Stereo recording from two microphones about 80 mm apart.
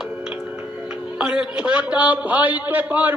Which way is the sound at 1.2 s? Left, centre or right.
Centre.